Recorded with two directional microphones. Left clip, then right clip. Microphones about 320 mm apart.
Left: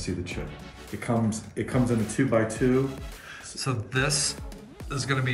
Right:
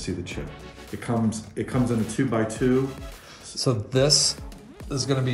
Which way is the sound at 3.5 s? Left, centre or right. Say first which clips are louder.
Right 5 dB; centre.